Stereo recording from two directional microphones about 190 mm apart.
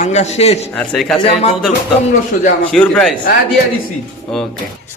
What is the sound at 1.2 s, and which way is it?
Speech, 35° left (ahead or behind).